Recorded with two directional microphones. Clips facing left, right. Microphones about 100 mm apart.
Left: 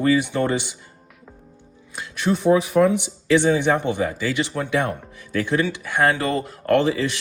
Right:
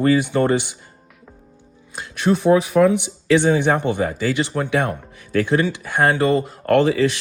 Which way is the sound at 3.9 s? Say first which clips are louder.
Right 2 dB; 40° right (ahead or behind).